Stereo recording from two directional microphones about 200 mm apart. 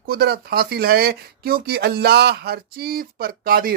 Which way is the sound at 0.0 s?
50° right (ahead or behind).